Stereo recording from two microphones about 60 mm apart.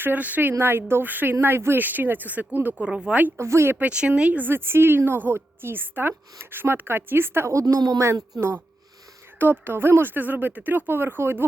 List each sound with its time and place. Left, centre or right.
0.0 s speech: right
0.5 s speech: right; by 3.2 s centre
3.3 s speech: right
3.8 s speech: centre; by 7.5 s right
7.5 s speech: right
8.4 s speech: right